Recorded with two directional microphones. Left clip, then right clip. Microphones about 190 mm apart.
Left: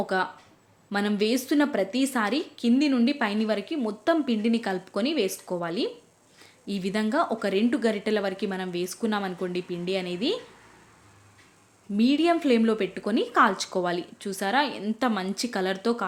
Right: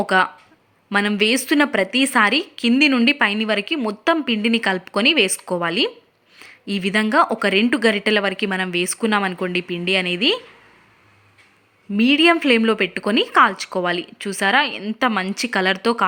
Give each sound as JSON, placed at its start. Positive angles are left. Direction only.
{"t": 0.0, "sound": "a woman's voice", "side_deg": -20}
{"t": 11.9, "sound": "a woman's voice", "side_deg": -15}